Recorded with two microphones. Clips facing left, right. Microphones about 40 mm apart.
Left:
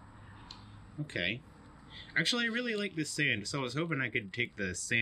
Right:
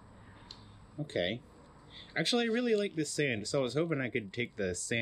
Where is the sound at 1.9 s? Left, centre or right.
Centre.